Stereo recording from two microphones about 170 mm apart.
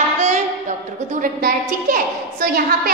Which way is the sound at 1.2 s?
55° right (ahead or behind).